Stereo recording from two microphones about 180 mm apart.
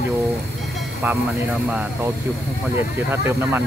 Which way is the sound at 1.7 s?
10° right (ahead or behind).